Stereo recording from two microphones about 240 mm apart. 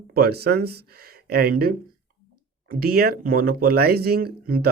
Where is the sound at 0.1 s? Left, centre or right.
Right.